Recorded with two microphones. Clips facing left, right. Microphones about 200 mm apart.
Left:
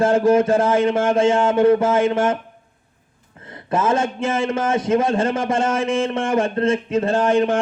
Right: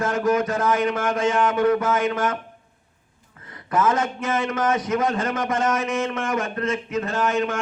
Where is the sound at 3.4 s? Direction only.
25° left (ahead or behind).